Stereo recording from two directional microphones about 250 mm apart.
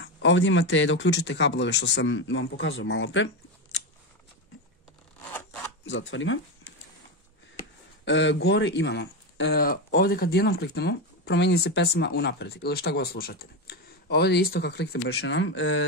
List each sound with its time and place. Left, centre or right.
0.0 s speech: left
5.9 s speech: left
8.0 s speech: left